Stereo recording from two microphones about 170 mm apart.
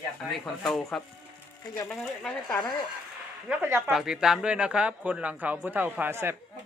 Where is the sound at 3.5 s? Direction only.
10° right (ahead or behind).